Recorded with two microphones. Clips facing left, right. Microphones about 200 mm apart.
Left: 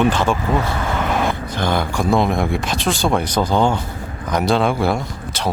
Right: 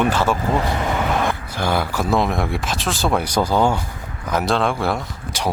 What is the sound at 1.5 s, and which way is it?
Speech, 5° right (ahead or behind).